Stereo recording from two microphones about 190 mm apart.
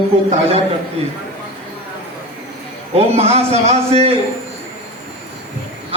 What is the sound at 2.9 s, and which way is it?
A man's voice, 30° right (ahead or behind).